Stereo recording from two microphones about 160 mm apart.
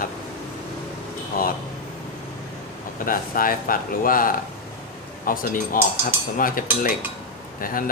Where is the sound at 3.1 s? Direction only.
60° left (ahead or behind).